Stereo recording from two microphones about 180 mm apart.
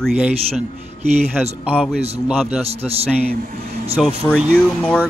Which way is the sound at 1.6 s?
5° right (ahead or behind).